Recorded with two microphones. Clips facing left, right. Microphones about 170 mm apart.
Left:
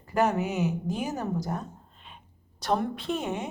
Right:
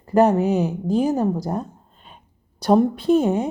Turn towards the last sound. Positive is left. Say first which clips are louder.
# right 13 dB
turn(degrees=-35)  # may be behind; listen again after turning